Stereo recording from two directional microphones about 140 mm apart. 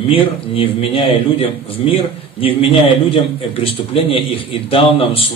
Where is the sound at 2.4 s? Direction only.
40° left (ahead or behind).